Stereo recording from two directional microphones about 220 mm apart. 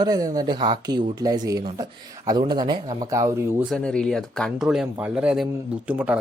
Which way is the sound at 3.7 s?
5° left (ahead or behind).